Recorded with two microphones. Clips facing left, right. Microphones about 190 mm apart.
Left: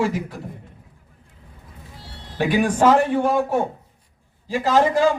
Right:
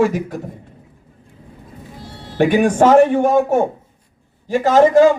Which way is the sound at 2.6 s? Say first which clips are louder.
Right 2 dB; 45° right (ahead or behind).